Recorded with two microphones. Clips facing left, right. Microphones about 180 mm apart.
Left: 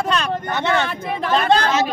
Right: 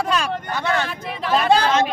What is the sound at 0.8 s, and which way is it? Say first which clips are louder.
Speech: left 3 dB; 55° left (ahead or behind).